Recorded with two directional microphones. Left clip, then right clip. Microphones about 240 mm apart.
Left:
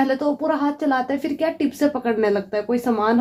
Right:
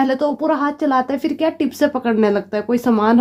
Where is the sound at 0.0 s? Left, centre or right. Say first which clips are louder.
Right 3 dB; right.